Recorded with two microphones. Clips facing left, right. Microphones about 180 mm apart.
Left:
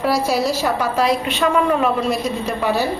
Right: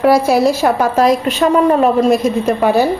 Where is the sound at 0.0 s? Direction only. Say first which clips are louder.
Right 8 dB; 55° right (ahead or behind).